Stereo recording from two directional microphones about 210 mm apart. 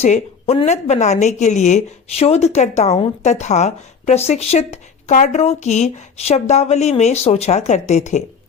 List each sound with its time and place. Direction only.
0.0 s a woman's voice: 30° left (ahead or behind)